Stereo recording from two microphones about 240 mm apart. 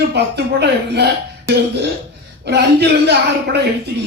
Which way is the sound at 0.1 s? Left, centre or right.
Right.